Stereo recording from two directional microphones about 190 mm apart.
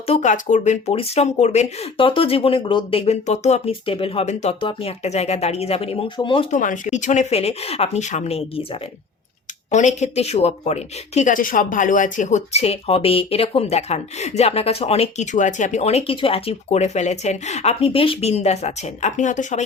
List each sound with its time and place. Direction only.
0.1 s speech: 40° left (ahead or behind)
6.6 s speech: 40° left (ahead or behind)